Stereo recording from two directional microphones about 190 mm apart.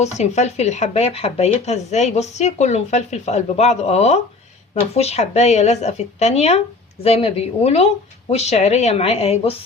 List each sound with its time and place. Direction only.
0.0 s speech: 35° left (ahead or behind)